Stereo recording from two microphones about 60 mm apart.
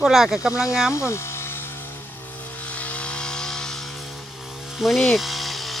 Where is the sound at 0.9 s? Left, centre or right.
Left.